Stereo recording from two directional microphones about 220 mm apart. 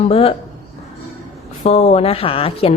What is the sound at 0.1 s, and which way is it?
Speech, 25° left (ahead or behind).